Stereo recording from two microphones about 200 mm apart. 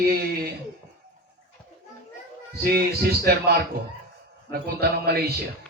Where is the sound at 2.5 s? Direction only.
50° right (ahead or behind).